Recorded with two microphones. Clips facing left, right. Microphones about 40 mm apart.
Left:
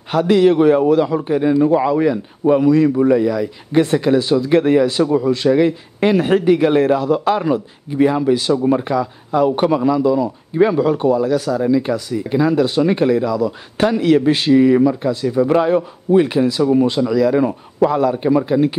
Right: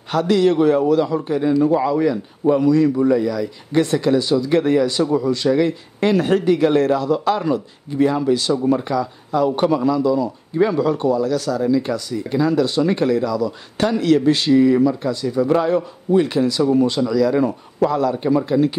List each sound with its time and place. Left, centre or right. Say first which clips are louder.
0.1 s a man's voice: left 3 dB; centre